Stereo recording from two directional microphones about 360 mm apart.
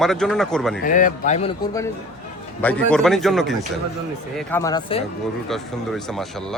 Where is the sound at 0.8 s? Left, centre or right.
Left.